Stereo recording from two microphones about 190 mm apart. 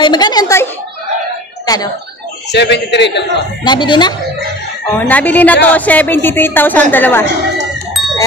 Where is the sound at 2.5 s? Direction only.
65° left (ahead or behind).